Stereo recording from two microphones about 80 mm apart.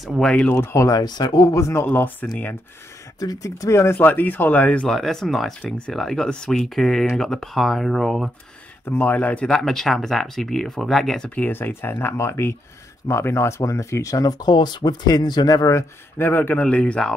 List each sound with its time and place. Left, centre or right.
0.0 s speech: centre
0.7 s speech: left
1.6 s speech: left
3.2 s speech: left; by 4.8 s centre
4.8 s speech: centre
8.8 s speech: left
9.5 s speech: centre
11.2 s speech: centre; by 15.8 s left
16.2 s speech: left
16.6 s speech: centre